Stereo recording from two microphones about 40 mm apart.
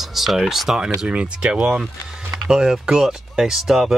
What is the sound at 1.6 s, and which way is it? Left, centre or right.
Speech, centre.